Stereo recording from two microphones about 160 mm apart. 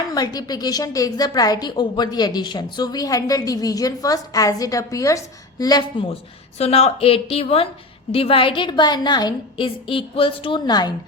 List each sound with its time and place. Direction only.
0.1 s a woman's voice: 25° left (ahead or behind)
6.6 s a woman's voice: 40° left (ahead or behind); by 10.9 s 25° left (ahead or behind)